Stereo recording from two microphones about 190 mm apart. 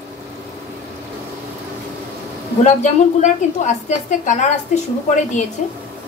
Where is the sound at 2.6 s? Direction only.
40° left (ahead or behind).